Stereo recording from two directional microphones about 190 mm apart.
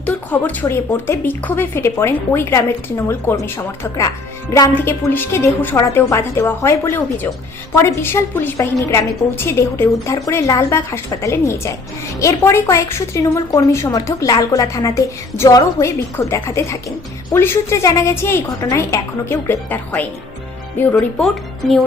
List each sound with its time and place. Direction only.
0.0 s a woman's voice: 10° left (ahead or behind)
4.5 s a woman's voice: 15° left (ahead or behind)